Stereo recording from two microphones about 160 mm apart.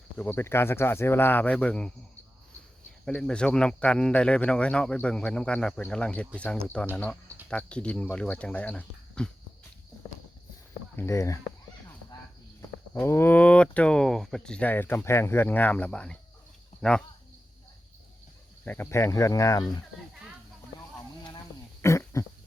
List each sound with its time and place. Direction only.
0.2 s speech: 15° left (ahead or behind)
3.1 s speech: 5° left (ahead or behind)
10.9 s speech: 15° left (ahead or behind)
12.9 s speech: 15° left (ahead or behind)
18.6 s speech: 10° left (ahead or behind)
21.8 s cough: 20° left (ahead or behind)